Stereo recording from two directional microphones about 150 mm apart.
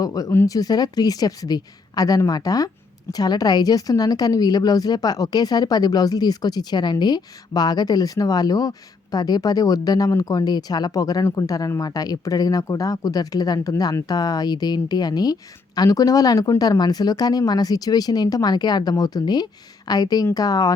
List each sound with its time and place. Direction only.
0.0 s speech: 25° left (ahead or behind)